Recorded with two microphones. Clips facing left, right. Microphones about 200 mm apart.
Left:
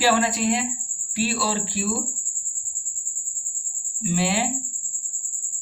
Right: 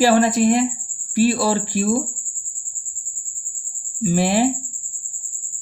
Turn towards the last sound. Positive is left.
turn(degrees=-45)  # may be behind; listen again after turning